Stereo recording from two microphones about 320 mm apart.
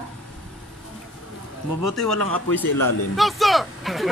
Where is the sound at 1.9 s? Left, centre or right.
Centre.